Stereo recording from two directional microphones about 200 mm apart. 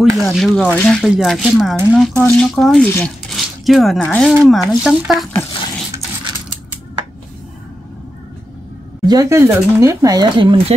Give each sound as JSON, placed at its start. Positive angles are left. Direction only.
{"t": 0.3, "sound": "speech", "side_deg": 0}
{"t": 9.0, "sound": "speech", "side_deg": -20}